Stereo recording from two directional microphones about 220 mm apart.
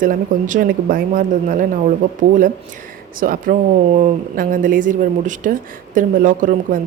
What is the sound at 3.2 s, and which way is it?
Speech, 40° right (ahead or behind).